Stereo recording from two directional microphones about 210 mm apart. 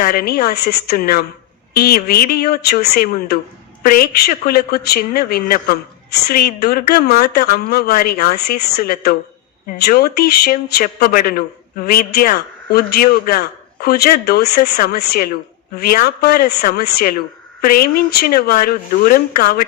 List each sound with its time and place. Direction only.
0.0 s a man's voice: 45° left (ahead or behind)